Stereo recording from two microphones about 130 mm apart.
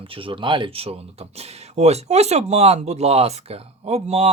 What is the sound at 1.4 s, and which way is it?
Speech, 55° right (ahead or behind).